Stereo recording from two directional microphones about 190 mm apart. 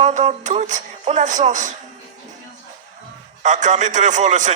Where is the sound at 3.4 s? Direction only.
40° right (ahead or behind).